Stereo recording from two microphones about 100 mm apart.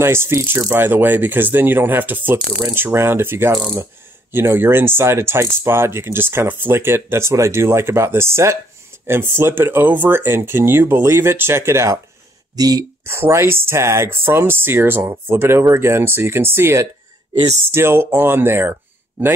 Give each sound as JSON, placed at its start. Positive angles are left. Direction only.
{"t": 0.0, "sound": "speech", "side_deg": -25}
{"t": 12.5, "sound": "speech", "side_deg": -40}
{"t": 13.0, "sound": "speech", "side_deg": -25}